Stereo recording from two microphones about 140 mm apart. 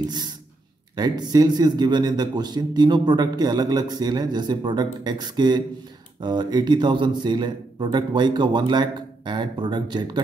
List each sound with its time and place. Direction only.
0.9 s a man's voice: 30° right (ahead or behind)